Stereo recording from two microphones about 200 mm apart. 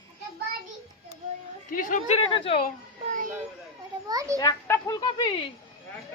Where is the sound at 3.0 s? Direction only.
40° right (ahead or behind).